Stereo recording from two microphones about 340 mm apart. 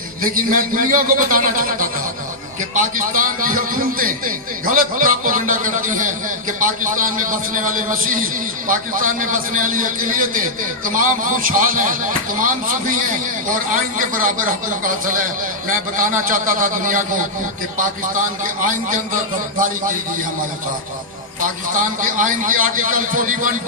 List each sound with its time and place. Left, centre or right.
0.2 s a man's voice: right
18.6 s a man's voice: right
22.0 s a man's voice: right